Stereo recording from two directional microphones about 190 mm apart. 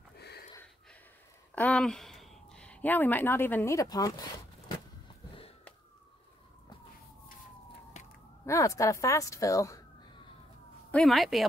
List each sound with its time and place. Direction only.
1.5 s speech: 5° left (ahead or behind)
8.5 s speech: 15° left (ahead or behind)
10.9 s speech: centre (ahead or behind)